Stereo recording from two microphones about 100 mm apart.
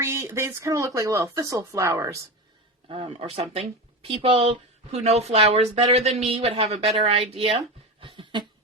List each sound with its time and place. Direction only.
0.0 s speech: 30° right (ahead or behind)
2.9 s speech: 70° right (ahead or behind)
4.9 s speech: 90° right; by 7.6 s 75° right (ahead or behind)
8.0 s a sound: 55° right (ahead or behind)